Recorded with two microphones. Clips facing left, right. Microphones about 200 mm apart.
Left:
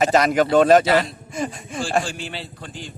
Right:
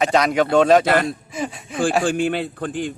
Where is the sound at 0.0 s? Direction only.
Centre (ahead or behind).